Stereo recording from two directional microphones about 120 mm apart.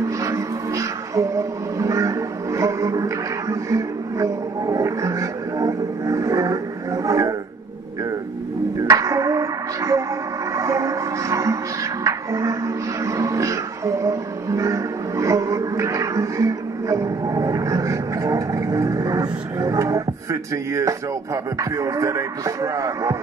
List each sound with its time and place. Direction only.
0.2 s music: 25° right (ahead or behind)
8.8 s music: 25° right (ahead or behind)